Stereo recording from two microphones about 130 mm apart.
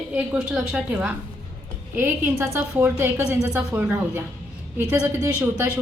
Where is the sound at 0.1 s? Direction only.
5° right (ahead or behind).